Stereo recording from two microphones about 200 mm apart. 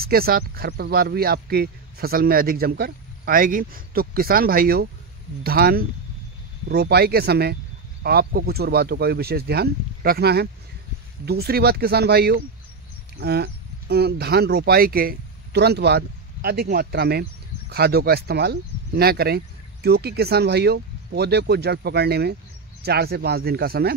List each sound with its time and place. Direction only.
0.0 s speech: 50° right (ahead or behind)